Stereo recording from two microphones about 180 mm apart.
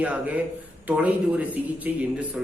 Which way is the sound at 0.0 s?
10° right (ahead or behind).